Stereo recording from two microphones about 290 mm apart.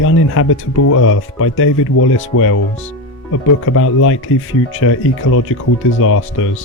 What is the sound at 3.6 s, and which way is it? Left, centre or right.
Speech, left.